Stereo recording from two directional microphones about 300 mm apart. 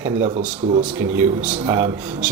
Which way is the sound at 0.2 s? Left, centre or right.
Right.